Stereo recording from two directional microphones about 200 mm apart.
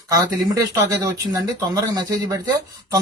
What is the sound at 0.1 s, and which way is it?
Speech, 15° right (ahead or behind).